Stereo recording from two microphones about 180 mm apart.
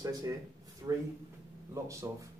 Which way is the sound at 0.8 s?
15° right (ahead or behind).